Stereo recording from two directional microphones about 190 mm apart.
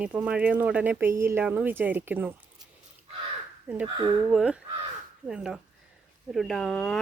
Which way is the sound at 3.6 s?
5° right (ahead or behind).